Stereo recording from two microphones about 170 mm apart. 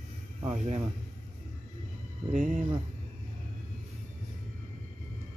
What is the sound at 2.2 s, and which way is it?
Speech, 45° right (ahead or behind).